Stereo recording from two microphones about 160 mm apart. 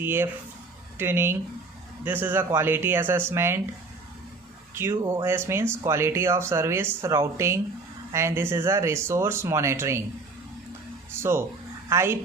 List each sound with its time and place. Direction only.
0.0 s speech: 15° right (ahead or behind)
4.7 s speech: 15° right (ahead or behind)
11.1 s a woman's voice: 15° right (ahead or behind)